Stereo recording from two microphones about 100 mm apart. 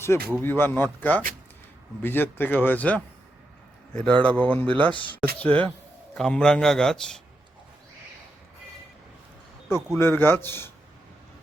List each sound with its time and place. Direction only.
0.1 s a man's voice: 25° left (ahead or behind); by 7.2 s 5° left (ahead or behind)
10.0 s speech: 25° left (ahead or behind)